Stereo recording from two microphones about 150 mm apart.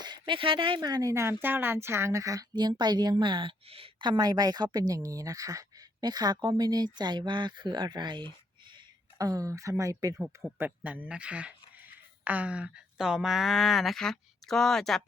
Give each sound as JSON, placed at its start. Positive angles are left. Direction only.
{"t": 0.0, "sound": "speech", "side_deg": -30}
{"t": 10.2, "sound": "speech", "side_deg": -10}